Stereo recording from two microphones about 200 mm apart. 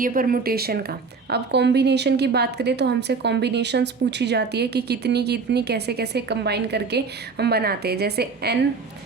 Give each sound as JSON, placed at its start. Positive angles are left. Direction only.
{"t": 0.0, "sound": "a woman's voice", "side_deg": -45}